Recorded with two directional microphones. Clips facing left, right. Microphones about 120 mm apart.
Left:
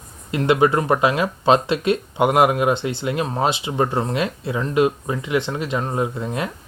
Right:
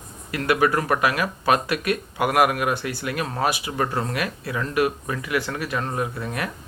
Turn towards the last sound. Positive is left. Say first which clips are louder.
# left 4 dB
turn(degrees=20)  # may be behind; listen again after turning